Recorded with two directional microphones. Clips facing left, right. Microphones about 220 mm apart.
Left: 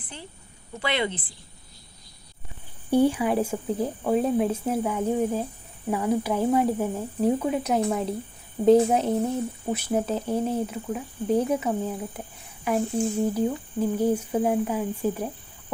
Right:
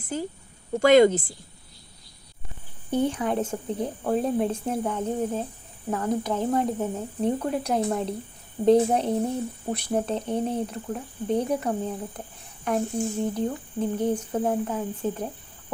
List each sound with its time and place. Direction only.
0.0 s a woman's voice: 40° right (ahead or behind)
2.9 s speech: 10° left (ahead or behind)